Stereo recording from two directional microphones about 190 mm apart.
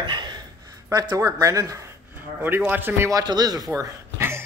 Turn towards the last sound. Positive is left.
turn(degrees=-15)  # may be behind; listen again after turning